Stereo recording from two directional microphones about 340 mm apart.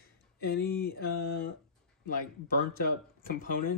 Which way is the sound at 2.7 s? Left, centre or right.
Left.